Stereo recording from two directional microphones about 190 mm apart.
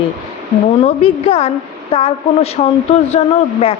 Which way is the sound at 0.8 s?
30° left (ahead or behind).